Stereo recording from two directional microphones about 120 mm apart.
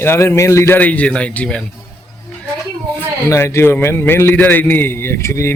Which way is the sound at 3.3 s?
20° left (ahead or behind).